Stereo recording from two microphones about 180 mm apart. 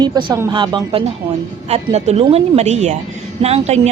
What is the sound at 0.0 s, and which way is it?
A woman's voice, 25° right (ahead or behind).